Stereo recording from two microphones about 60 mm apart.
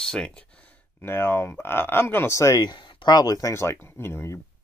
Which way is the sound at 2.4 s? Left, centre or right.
Left.